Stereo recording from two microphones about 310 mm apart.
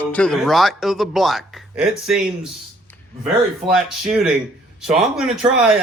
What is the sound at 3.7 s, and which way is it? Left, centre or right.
Speech, centre.